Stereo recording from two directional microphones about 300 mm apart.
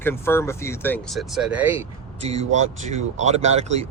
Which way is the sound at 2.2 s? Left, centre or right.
Right.